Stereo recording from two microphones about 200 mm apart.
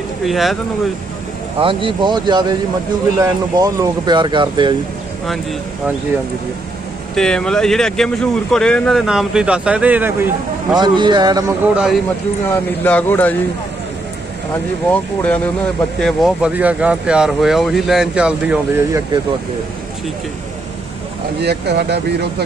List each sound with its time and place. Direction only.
0.2 s speech: centre (ahead or behind)
1.6 s speech: 25° right (ahead or behind)
7.2 s speech: 5° left (ahead or behind)
10.8 s speech: 20° right (ahead or behind); by 12.0 s 5° right (ahead or behind)
12.4 s speech: 10° left (ahead or behind)
14.9 s speech: 5° left (ahead or behind)
21.4 s speech: 55° right (ahead or behind)